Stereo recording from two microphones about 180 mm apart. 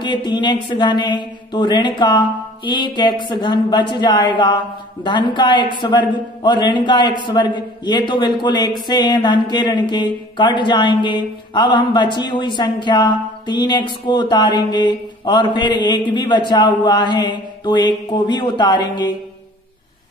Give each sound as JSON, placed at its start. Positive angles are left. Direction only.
{"t": 0.0, "sound": "speech", "side_deg": 25}